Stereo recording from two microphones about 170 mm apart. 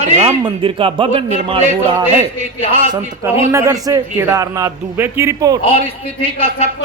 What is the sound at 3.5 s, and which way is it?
A man's voice, 20° right (ahead or behind).